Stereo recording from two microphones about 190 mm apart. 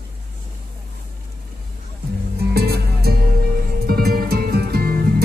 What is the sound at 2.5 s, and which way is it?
Music, 55° right (ahead or behind).